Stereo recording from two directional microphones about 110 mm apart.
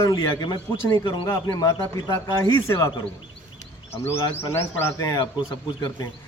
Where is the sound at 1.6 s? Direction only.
30° left (ahead or behind).